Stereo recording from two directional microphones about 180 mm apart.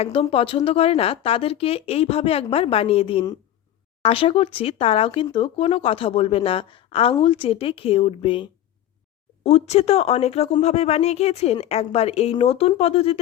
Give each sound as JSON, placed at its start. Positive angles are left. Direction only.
{"t": 0.0, "sound": "speech", "side_deg": 30}